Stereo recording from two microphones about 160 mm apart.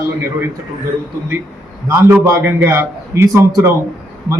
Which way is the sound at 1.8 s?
15° right (ahead or behind).